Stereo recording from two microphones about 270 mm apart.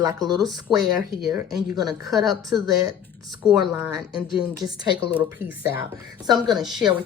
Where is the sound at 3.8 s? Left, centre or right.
Centre.